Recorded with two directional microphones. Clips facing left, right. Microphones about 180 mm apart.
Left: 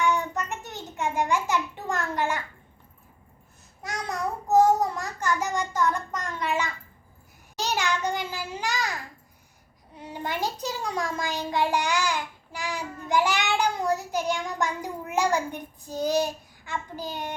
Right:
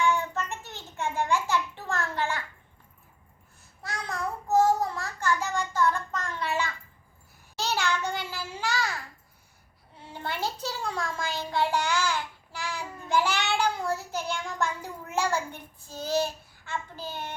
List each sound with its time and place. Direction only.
0.0 s child singing: 15° left (ahead or behind)
0.6 s a child's voice: 15° left (ahead or behind)
3.8 s a child's voice: 15° left (ahead or behind)
10.0 s a child's voice: 15° left (ahead or behind)